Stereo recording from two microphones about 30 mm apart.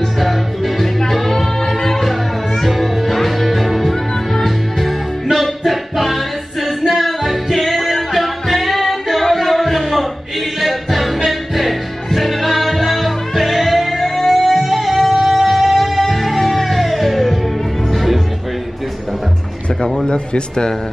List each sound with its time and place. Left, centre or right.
0.2 s music: centre
2.6 s music: centre
20.1 s speech: left